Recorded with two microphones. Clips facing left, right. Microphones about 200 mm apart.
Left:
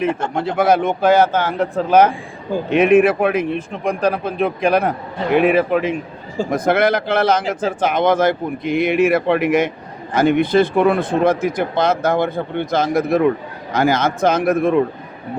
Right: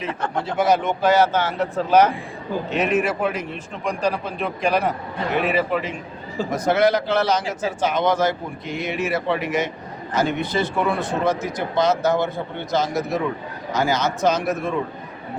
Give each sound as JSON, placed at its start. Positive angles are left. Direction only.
{"t": 0.4, "sound": "a man's voice", "side_deg": 55}